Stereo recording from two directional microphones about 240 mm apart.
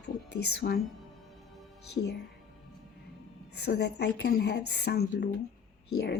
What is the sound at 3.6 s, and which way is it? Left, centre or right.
Speech, left.